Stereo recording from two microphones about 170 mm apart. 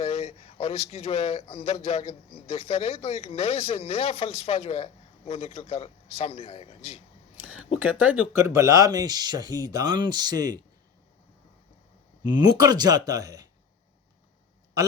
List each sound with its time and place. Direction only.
0.0 s speech: 35° left (ahead or behind)
7.8 s speech: 10° right (ahead or behind)
12.2 s speech: 25° right (ahead or behind)